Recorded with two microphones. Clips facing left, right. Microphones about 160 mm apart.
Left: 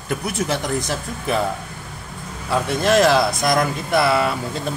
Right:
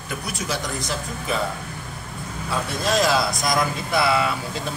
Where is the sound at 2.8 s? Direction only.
65° left (ahead or behind).